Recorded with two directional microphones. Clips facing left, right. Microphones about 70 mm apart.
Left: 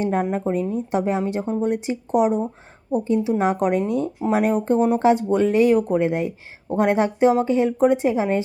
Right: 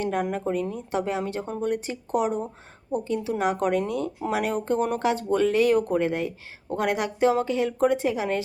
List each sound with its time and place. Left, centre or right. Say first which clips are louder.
0.0 s speech: left 4 dB; left